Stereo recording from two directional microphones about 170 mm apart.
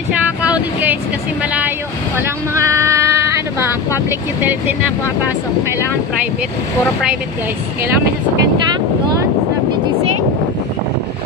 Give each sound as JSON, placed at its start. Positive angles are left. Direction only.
{"t": 0.5, "sound": "vehicle", "side_deg": -10}
{"t": 2.1, "sound": "vehicle", "side_deg": -15}
{"t": 4.4, "sound": "speech", "side_deg": -10}